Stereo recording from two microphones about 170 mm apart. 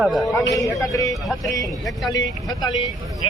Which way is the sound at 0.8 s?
20° left (ahead or behind).